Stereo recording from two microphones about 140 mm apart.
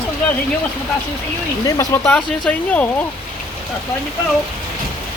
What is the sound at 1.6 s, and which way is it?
Speech, 20° left (ahead or behind).